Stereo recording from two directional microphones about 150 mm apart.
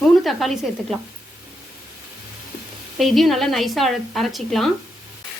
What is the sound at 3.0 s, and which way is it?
A woman's voice, centre (ahead or behind).